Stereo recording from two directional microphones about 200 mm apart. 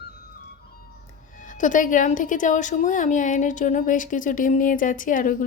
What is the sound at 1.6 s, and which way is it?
Speech, 40° left (ahead or behind).